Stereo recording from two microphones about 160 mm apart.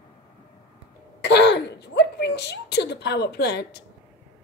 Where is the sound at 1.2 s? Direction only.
90° left.